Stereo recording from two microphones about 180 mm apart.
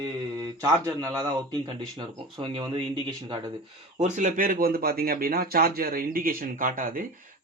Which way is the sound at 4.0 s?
40° right (ahead or behind).